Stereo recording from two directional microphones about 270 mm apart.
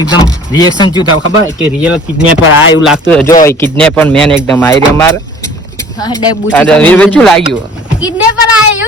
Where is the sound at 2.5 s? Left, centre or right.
Left.